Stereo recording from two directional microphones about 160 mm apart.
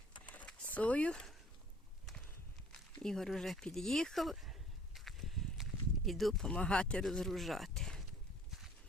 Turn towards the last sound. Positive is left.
turn(degrees=5)  # may be behind; listen again after turning